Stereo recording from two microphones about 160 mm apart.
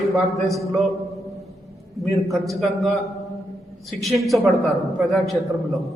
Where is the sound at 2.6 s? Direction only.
Centre (ahead or behind).